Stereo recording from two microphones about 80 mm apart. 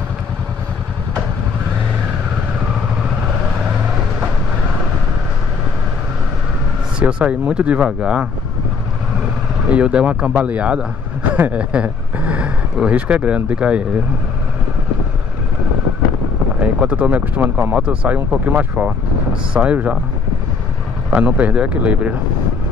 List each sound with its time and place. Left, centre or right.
7.0 s speech: centre
9.7 s speech: centre
16.6 s speech: centre
21.1 s speech: centre